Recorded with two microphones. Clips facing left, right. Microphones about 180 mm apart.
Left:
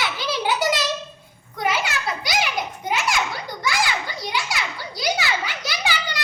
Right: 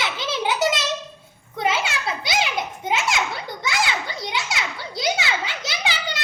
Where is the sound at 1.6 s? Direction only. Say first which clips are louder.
Even; 25° right (ahead or behind).